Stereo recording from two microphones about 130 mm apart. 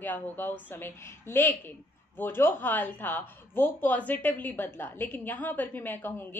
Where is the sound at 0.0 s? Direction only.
15° left (ahead or behind).